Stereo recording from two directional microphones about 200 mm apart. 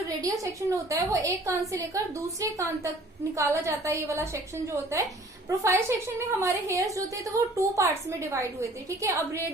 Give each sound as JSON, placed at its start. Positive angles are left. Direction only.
{"t": 0.4, "sound": "a woman's voice", "side_deg": -15}
{"t": 9.0, "sound": "a woman's voice", "side_deg": -15}